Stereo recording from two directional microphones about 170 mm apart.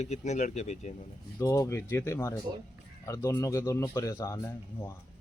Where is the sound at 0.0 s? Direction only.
45° left (ahead or behind).